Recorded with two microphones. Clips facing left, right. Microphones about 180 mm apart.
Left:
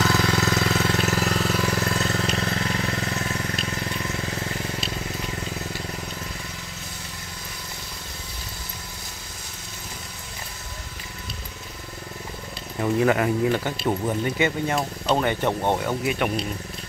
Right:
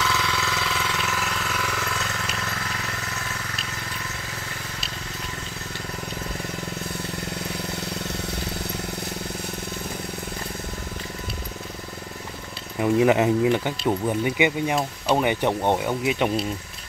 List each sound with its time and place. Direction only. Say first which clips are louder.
0.0 s vehicle: left 4 dB; 40° left (ahead or behind)
12.8 s speech: right 2 dB; 15° right (ahead or behind)